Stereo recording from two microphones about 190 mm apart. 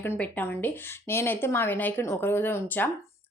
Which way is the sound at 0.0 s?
10° left (ahead or behind).